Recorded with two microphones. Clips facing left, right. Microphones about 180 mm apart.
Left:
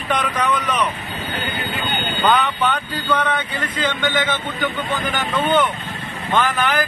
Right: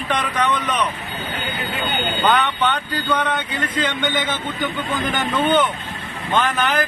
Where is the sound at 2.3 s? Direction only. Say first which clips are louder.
Left 2 dB; centre (ahead or behind).